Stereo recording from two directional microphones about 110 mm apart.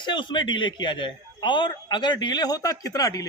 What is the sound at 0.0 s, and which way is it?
A man's voice, 45° left (ahead or behind).